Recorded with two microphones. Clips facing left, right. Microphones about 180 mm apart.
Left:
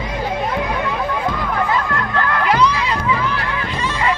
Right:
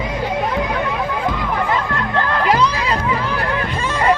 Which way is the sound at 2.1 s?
30° right (ahead or behind).